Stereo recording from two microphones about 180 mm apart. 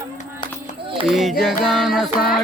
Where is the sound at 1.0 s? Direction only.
Centre (ahead or behind).